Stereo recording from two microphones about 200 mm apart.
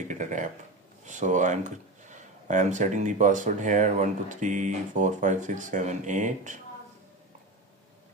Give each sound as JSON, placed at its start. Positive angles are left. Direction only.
{"t": 0.1, "sound": "speech", "side_deg": -40}